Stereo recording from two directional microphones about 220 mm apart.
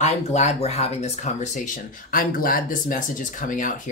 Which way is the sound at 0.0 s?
30° left (ahead or behind).